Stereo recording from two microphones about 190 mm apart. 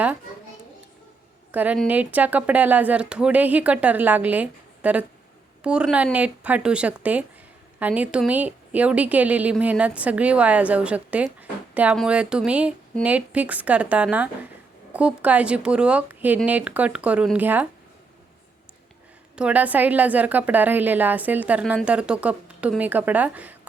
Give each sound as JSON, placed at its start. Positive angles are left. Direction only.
{"t": 1.5, "sound": "a woman's voice", "side_deg": -10}
{"t": 19.4, "sound": "a woman's voice", "side_deg": -5}